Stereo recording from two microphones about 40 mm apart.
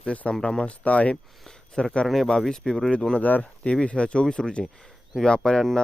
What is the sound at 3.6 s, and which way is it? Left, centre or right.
Speech, left.